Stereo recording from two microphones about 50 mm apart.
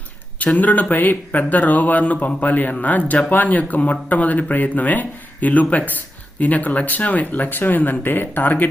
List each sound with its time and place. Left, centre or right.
0.3 s speech: left